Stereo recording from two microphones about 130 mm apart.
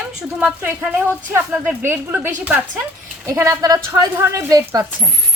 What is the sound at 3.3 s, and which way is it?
A woman's voice, 25° right (ahead or behind).